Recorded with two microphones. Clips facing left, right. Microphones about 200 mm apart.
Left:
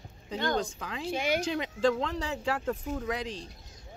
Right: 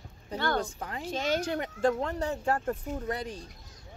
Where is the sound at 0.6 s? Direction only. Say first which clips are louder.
Even; 90° left.